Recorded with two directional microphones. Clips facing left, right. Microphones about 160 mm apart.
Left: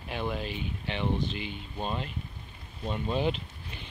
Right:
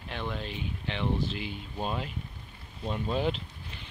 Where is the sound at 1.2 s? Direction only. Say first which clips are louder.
Even; 5° right (ahead or behind).